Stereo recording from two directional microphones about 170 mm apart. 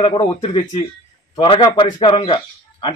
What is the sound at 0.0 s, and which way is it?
Speech, 30° left (ahead or behind).